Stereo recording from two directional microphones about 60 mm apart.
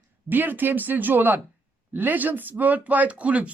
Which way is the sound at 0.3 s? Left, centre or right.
Right.